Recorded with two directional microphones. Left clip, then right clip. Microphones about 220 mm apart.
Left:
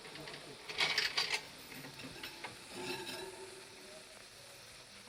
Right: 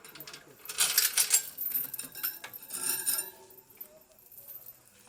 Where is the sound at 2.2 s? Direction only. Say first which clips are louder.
Right 4 dB; 40° right (ahead or behind).